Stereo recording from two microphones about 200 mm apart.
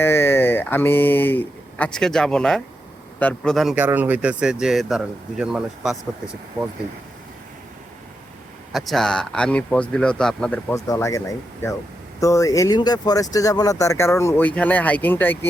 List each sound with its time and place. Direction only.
0.0 s speech: 10° left (ahead or behind)
8.7 s speech: centre (ahead or behind)
12.2 s speech: 15° left (ahead or behind)